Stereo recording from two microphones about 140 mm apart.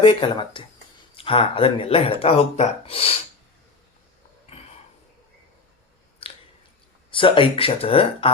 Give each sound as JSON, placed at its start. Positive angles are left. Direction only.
{"t": 0.0, "sound": "speech", "side_deg": 35}
{"t": 6.2, "sound": "chewing", "side_deg": 40}
{"t": 7.1, "sound": "speech", "side_deg": 40}